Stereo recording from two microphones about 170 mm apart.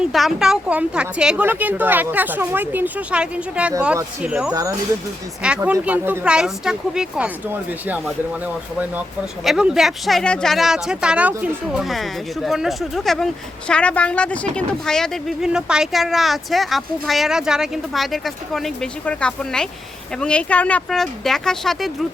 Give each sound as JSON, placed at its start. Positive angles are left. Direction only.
{"t": 0.0, "sound": "speech", "side_deg": 0}
{"t": 9.4, "sound": "speech", "side_deg": 0}